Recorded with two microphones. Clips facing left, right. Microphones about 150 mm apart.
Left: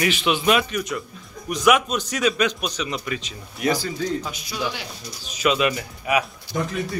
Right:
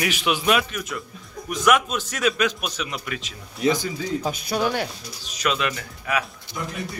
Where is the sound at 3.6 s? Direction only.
20° right (ahead or behind).